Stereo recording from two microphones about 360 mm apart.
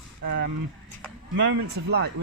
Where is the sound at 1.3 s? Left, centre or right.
Right.